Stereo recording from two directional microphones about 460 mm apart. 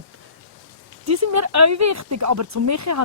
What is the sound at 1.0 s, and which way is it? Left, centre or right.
Speech, right.